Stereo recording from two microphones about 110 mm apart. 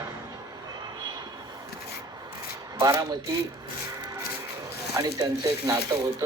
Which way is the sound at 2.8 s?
35° right (ahead or behind).